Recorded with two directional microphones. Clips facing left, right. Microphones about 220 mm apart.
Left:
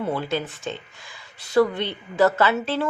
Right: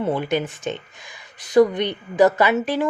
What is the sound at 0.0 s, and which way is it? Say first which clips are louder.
Speech: right 4 dB; 20° right (ahead or behind).